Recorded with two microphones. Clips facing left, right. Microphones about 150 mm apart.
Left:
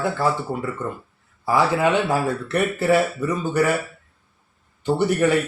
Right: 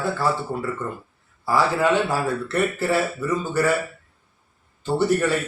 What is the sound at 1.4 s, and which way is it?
A man's voice, 20° left (ahead or behind).